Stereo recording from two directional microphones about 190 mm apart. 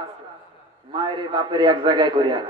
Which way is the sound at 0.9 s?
25° right (ahead or behind).